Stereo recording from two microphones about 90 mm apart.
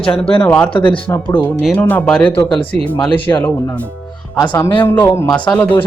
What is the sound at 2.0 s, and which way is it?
Speech, 10° left (ahead or behind).